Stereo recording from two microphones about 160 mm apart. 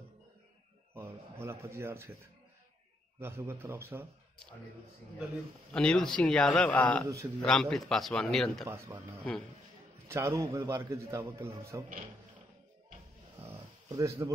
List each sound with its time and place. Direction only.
0.9 s speech: 15° right (ahead or behind)
3.2 s a man's voice: 15° right (ahead or behind)
5.7 s a man's voice: 5° left (ahead or behind)
7.1 s a man's voice: 20° right (ahead or behind)
7.3 s a man's voice: 5° left (ahead or behind)
8.6 s a man's voice: 15° right (ahead or behind)
10.0 s a man's voice: 15° right (ahead or behind)
13.4 s a sound: 15° right (ahead or behind)